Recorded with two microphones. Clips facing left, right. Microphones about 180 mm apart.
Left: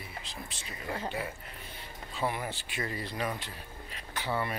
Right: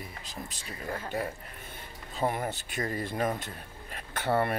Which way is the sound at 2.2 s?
45° right (ahead or behind).